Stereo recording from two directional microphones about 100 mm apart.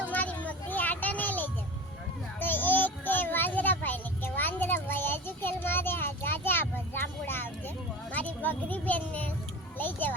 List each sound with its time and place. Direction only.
0.1 s children playing: 15° left (ahead or behind)
2.4 s child singing: 20° left (ahead or behind)
8.1 s a sound: 15° left (ahead or behind)